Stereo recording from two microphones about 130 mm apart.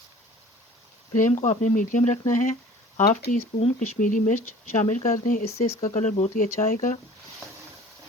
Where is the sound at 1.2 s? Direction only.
70° left (ahead or behind); by 5.4 s 90° left.